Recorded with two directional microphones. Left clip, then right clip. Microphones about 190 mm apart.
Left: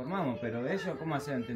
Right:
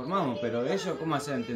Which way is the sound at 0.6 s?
10° right (ahead or behind).